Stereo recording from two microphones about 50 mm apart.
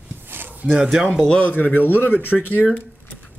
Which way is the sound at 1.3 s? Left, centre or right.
Left.